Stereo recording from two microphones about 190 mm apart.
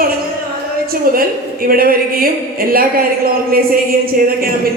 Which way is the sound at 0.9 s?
50° right (ahead or behind).